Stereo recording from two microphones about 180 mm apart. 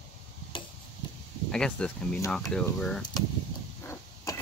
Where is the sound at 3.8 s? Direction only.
15° left (ahead or behind).